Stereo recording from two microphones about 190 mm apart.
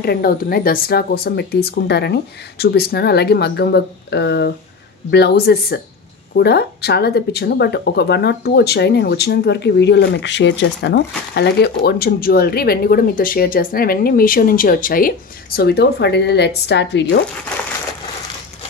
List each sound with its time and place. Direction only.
0.0 s speech: 55° left (ahead or behind)